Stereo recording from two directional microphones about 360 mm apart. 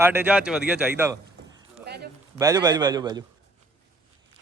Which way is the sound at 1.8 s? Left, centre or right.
Right.